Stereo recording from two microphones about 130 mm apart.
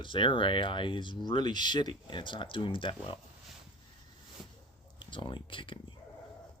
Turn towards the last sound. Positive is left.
turn(degrees=40)  # may be behind; listen again after turning